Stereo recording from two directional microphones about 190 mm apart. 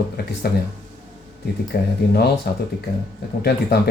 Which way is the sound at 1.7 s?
55° left (ahead or behind).